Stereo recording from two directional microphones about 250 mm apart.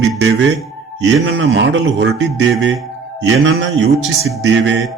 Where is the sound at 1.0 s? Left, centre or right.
Right.